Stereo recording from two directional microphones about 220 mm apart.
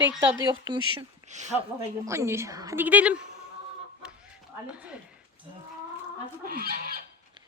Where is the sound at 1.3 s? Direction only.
30° right (ahead or behind).